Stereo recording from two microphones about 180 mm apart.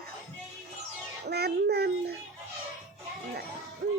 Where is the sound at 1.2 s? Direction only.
65° right (ahead or behind).